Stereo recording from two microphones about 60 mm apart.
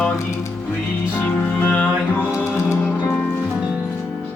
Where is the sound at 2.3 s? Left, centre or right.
Left.